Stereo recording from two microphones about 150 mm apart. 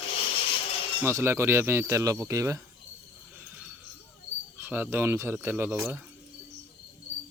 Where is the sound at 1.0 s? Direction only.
15° right (ahead or behind).